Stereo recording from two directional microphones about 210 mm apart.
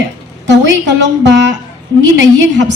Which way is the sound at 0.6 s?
60° right (ahead or behind).